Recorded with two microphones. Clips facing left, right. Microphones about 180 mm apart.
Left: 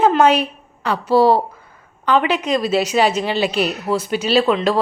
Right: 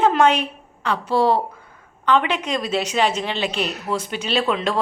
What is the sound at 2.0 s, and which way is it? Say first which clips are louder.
Speech: left 3 dB; 5° left (ahead or behind).